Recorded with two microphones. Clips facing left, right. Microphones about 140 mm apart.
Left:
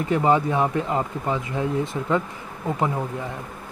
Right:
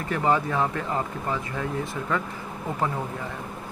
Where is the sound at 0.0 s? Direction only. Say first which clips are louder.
Left 4 dB; 20° left (ahead or behind).